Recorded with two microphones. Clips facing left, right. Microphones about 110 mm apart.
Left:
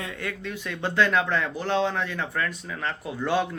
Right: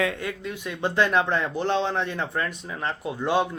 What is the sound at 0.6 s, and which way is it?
Speech, 20° right (ahead or behind).